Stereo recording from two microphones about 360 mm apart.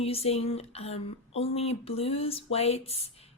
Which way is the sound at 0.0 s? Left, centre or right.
Centre.